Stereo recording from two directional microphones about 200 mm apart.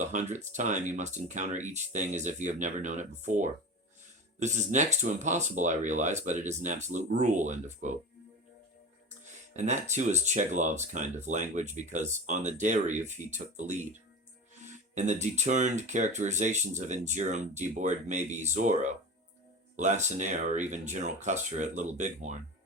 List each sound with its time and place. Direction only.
0.0 s speech: 35° right (ahead or behind)
9.5 s speech: 35° right (ahead or behind)